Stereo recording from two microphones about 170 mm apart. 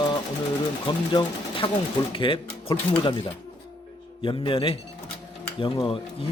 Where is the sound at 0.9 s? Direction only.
30° left (ahead or behind).